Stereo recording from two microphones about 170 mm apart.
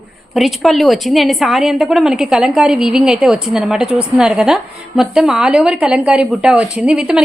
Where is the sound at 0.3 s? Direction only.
Centre (ahead or behind).